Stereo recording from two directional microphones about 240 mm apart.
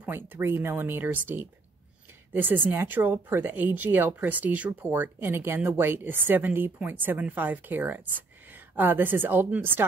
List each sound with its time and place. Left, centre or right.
0.0 s speech: centre